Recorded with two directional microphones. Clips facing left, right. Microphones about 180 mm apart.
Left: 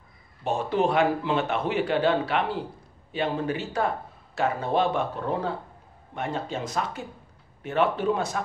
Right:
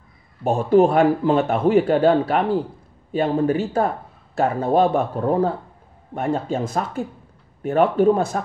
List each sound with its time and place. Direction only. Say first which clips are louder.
0.4 s a man's voice: right 9 dB; 45° right (ahead or behind)